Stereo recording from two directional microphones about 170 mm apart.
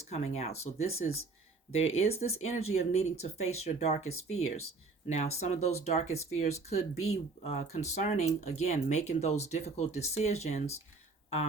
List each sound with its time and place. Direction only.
0.1 s speech: 40° left (ahead or behind)